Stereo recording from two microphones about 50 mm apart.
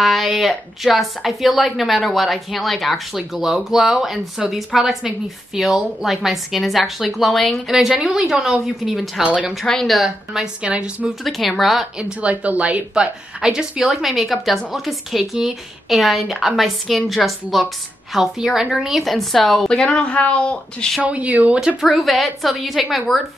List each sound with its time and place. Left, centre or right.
0.0 s a woman's voice: centre
7.6 s a woman's voice: centre
8.9 s a woman's voice: centre
9.2 s speech: right
9.7 s a woman's voice: centre
10.6 s speech: right
11.2 s a woman's voice: centre
12.0 s a woman's voice: right; by 19.7 s centre
19.7 s speech: centre
21.0 s speech: right
21.9 s a woman's voice: centre